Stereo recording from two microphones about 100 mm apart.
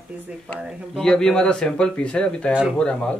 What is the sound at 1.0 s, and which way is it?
Speech, 5° left (ahead or behind).